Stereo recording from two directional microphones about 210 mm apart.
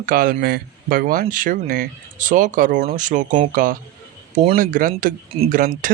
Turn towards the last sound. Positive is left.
turn(degrees=-40)  # may be behind; listen again after turning